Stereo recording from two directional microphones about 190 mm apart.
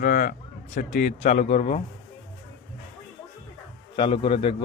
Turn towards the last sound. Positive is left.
turn(degrees=25)  # may be behind; listen again after turning